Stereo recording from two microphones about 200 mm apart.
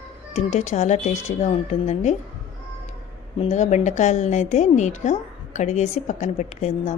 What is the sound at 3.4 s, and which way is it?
A woman's voice, 35° left (ahead or behind).